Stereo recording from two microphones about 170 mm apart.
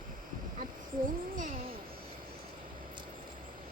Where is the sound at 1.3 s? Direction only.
50° right (ahead or behind).